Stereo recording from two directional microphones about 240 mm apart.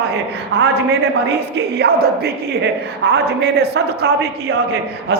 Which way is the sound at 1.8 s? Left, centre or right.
Right.